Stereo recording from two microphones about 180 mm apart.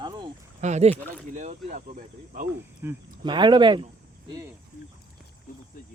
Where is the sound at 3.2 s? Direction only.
25° right (ahead or behind).